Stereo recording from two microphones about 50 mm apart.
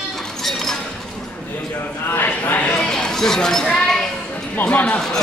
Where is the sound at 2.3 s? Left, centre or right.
Left.